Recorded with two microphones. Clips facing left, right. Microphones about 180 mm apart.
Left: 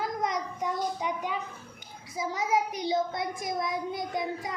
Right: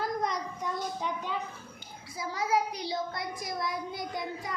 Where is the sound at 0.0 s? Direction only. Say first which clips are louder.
Left 1 dB; 20° left (ahead or behind).